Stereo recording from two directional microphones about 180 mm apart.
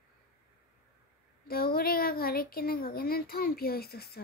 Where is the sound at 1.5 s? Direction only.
55° left (ahead or behind).